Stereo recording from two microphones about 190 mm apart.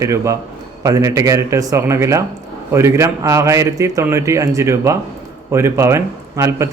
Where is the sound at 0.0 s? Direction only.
15° right (ahead or behind).